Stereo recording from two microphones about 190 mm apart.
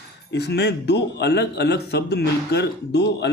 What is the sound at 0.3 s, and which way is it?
Speech, 60° left (ahead or behind).